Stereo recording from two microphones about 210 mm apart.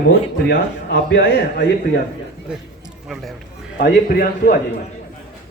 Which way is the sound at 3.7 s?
45° left (ahead or behind).